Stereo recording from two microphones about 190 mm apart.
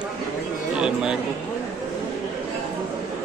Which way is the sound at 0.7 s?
5° right (ahead or behind).